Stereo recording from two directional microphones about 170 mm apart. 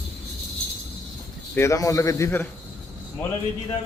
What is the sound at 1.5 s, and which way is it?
Speech, 20° left (ahead or behind).